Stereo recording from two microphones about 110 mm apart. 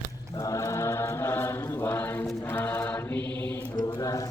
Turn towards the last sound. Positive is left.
turn(degrees=30)  # may be behind; listen again after turning